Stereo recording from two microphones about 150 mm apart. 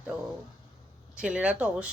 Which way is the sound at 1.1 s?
5° right (ahead or behind).